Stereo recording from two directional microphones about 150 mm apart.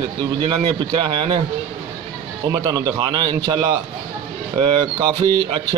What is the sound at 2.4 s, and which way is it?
A man's voice, 25° right (ahead or behind).